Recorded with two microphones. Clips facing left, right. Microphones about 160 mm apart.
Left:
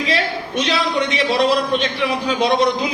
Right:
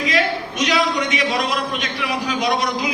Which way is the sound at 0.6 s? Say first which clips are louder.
Even; 30° left (ahead or behind).